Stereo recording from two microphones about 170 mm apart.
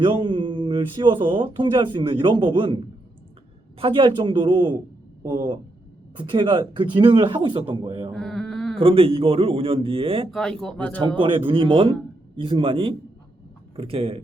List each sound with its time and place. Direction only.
0.0 s speech: 30° right (ahead or behind)
8.1 s a sound: 5° left (ahead or behind)
8.8 s a man's voice: 35° right (ahead or behind)
10.6 s speech: 5° left (ahead or behind)
11.2 s a man's voice: 30° right (ahead or behind)